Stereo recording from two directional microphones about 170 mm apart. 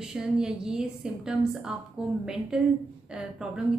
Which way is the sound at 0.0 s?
5° right (ahead or behind).